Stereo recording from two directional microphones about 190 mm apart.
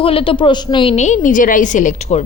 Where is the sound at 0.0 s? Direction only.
30° left (ahead or behind).